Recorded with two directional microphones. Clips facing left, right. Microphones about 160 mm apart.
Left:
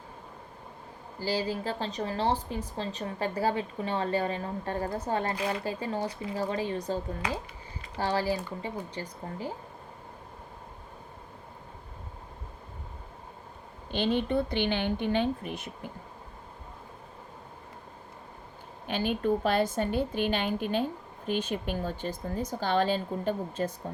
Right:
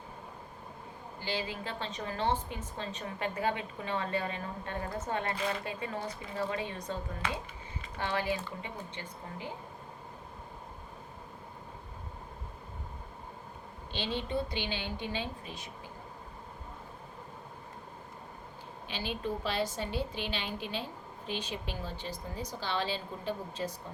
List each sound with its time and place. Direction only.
1.2 s speech: 35° left (ahead or behind)
13.9 s speech: 55° left (ahead or behind)
18.9 s a woman's voice: 50° left (ahead or behind)